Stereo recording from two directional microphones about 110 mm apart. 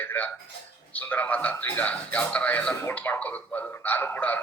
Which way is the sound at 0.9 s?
15° left (ahead or behind).